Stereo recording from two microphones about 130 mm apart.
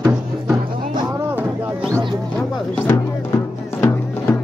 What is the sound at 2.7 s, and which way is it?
Music, 15° left (ahead or behind).